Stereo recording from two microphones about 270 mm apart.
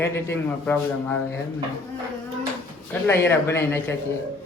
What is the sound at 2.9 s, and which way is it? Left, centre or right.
A man's voice, centre.